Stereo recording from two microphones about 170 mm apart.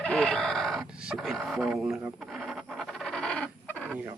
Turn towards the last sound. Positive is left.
turn(degrees=5)  # may be behind; listen again after turning